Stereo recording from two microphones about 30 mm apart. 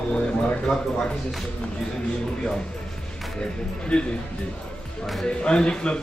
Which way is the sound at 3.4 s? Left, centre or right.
Left.